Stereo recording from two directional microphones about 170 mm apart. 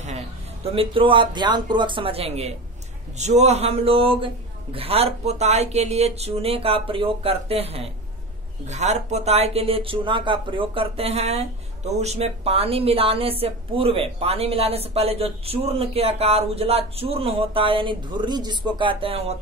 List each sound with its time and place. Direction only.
0.7 s speech: 30° right (ahead or behind)